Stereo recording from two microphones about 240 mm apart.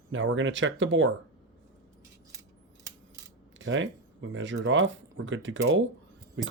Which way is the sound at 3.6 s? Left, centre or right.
Right.